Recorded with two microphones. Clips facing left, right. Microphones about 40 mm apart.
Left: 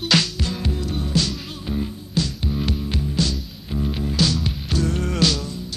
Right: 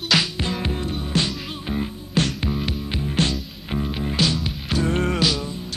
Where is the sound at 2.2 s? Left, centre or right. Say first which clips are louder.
Right 2 dB; right.